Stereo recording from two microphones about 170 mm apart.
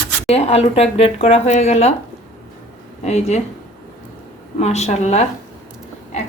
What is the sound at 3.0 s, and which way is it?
Speech, 40° left (ahead or behind).